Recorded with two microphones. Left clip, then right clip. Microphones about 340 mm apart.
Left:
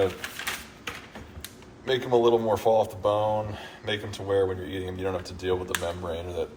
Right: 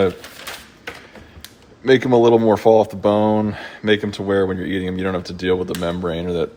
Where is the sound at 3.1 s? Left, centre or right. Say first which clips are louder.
Right 8 dB; right.